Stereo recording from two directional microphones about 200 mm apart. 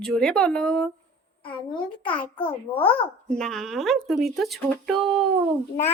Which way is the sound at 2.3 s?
25° left (ahead or behind).